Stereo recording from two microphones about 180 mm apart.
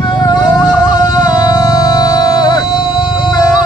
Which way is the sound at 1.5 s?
20° left (ahead or behind).